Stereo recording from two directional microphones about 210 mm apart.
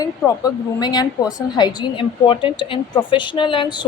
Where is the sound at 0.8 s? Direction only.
20° left (ahead or behind).